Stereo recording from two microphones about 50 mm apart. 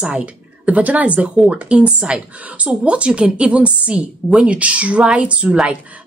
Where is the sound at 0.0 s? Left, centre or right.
Right.